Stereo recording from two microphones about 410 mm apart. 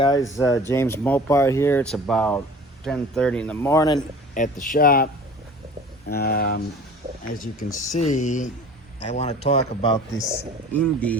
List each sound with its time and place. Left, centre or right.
0.0 s speech: centre
6.1 s speech: left; by 11.2 s centre